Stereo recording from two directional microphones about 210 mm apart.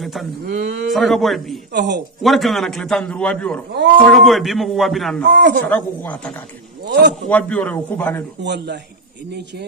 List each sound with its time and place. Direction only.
0.0 s speech: centre (ahead or behind)
0.4 s speech: 45° right (ahead or behind)
0.9 s a man's voice: centre (ahead or behind)
1.7 s a man's voice: 55° right (ahead or behind)
2.2 s a man's voice: centre (ahead or behind)
5.2 s speech: 55° right (ahead or behind)
5.7 s a man's voice: 5° left (ahead or behind)
6.8 s a man's voice: 55° right (ahead or behind)
7.2 s a man's voice: 5° left (ahead or behind)
8.4 s speech: 55° right (ahead or behind)